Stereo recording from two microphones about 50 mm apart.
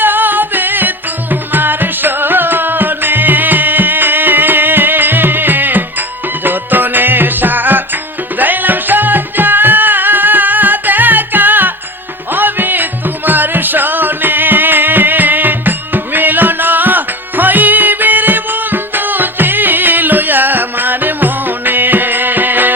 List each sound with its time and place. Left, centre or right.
0.0 s music: right